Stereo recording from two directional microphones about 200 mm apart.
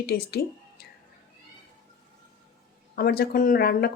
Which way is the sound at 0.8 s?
50° left (ahead or behind).